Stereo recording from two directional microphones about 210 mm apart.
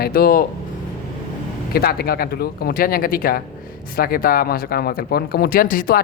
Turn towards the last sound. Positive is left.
turn(degrees=40)  # may be behind; listen again after turning